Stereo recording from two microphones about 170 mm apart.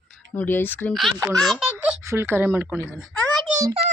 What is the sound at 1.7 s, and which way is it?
Speech, 15° right (ahead or behind).